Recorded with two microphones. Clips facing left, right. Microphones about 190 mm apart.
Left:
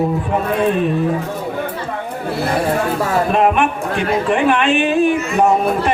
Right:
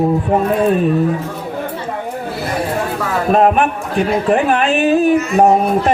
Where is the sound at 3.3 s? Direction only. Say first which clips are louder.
Right 5 dB; 40° right (ahead or behind).